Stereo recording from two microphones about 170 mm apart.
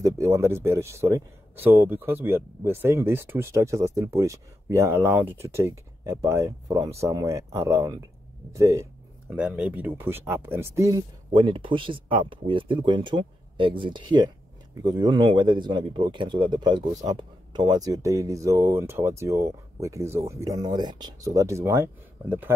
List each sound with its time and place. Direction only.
0.0 s speech: 15° right (ahead or behind)
9.3 s a man's voice: 5° right (ahead or behind)